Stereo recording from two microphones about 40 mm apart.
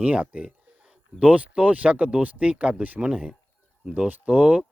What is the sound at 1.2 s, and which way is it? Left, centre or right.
Speech, right.